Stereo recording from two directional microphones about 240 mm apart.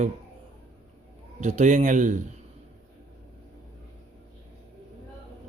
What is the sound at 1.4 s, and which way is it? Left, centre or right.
Speech, right.